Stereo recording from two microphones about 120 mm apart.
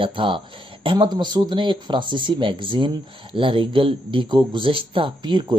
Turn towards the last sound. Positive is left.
turn(degrees=-40)  # may be behind; listen again after turning